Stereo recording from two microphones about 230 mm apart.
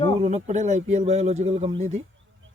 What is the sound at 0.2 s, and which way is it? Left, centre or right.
Speech, right.